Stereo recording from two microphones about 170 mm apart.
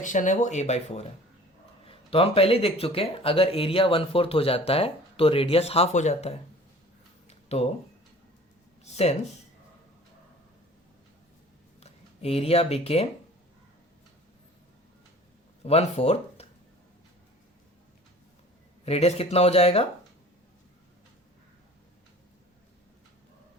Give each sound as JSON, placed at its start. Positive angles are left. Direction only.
{"t": 0.0, "sound": "speech", "side_deg": 50}
{"t": 7.3, "sound": "a sound", "side_deg": 35}
{"t": 8.8, "sound": "speech", "side_deg": 40}
{"t": 11.8, "sound": "speech", "side_deg": 35}
{"t": 15.6, "sound": "speech", "side_deg": 35}
{"t": 18.9, "sound": "speech", "side_deg": 35}